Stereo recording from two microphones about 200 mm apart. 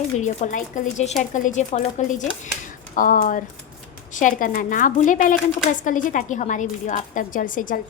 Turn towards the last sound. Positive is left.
turn(degrees=40)  # may be behind; listen again after turning